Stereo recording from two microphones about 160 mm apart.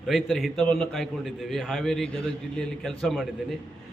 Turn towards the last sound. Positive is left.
turn(degrees=0)  # may be behind; listen again after turning